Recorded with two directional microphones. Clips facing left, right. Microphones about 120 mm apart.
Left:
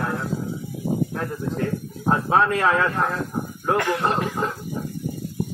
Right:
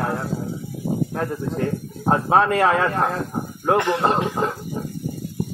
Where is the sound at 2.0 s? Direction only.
30° right (ahead or behind).